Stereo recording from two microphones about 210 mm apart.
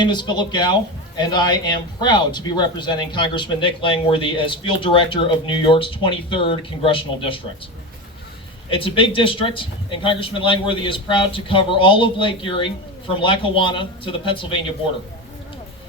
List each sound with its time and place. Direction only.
0.0 s speech: 20° left (ahead or behind)
8.7 s speech: 25° left (ahead or behind)